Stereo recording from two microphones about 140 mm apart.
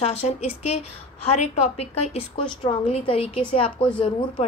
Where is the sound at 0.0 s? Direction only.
50° left (ahead or behind).